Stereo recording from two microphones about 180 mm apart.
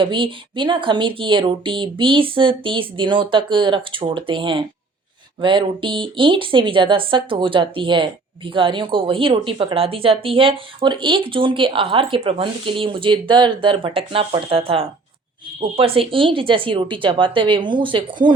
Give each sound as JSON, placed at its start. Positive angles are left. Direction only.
{"t": 0.0, "sound": "speech", "side_deg": -30}